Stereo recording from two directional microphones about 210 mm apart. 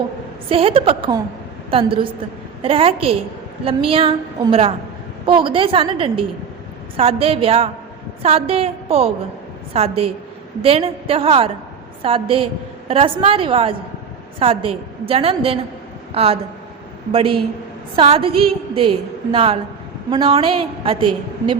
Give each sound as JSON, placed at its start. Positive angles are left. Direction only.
{"t": 0.4, "sound": "a woman's voice", "side_deg": -25}
{"t": 5.2, "sound": "a woman's voice", "side_deg": -25}